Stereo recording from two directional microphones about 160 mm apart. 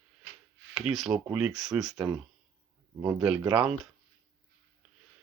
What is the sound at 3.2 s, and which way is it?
Speech, 5° right (ahead or behind).